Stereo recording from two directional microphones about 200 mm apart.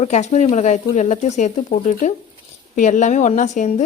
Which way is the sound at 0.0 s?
35° left (ahead or behind).